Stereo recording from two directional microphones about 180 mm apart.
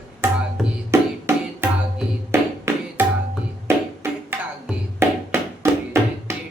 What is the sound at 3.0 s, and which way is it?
Music, 10° right (ahead or behind).